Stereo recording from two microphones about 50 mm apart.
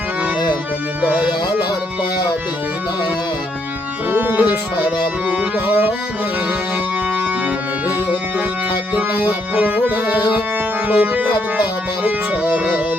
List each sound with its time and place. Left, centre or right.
1.0 s music: right
4.1 s music: right
5.3 s music: right
9.0 s music: right